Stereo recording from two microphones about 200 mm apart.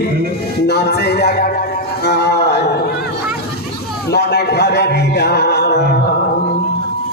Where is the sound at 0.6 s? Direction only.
55° left (ahead or behind).